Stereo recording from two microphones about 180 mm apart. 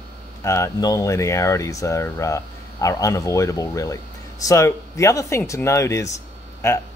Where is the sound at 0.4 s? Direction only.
15° left (ahead or behind).